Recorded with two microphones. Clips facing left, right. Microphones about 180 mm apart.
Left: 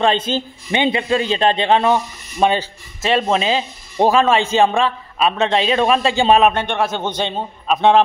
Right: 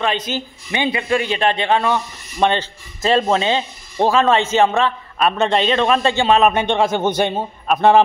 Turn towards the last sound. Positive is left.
turn(degrees=-5)  # may be behind; listen again after turning